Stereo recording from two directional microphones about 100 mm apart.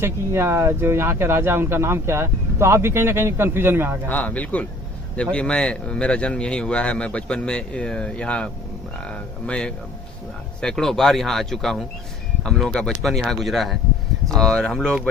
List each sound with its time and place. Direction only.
0.0 s speech: 25° right (ahead or behind)
4.1 s speech: 15° left (ahead or behind)